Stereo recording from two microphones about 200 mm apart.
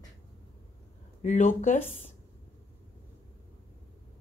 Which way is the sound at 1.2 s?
40° left (ahead or behind).